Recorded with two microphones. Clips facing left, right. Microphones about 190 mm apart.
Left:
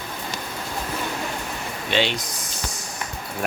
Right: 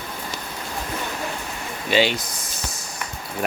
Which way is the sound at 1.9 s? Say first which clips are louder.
Right 3 dB; 5° right (ahead or behind).